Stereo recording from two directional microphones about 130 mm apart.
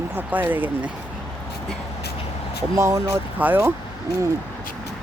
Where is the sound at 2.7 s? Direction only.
25° right (ahead or behind).